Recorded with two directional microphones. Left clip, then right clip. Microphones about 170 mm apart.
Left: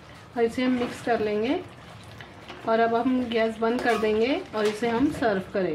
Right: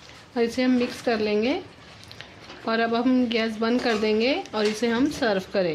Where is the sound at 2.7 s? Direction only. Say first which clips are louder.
Left 1 dB; 50° right (ahead or behind).